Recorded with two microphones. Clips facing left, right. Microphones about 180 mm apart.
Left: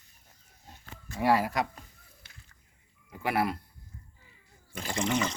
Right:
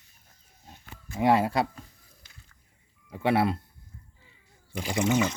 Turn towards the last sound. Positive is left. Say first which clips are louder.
# right 5 dB
turn(degrees=-10)  # may be behind; listen again after turning